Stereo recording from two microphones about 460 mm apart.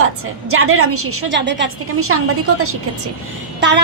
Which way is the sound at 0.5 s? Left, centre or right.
Right.